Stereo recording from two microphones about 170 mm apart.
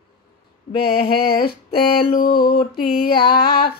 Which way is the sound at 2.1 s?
60° left (ahead or behind).